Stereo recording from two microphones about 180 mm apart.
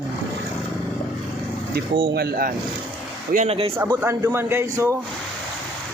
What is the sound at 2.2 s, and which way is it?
Speech, 60° right (ahead or behind).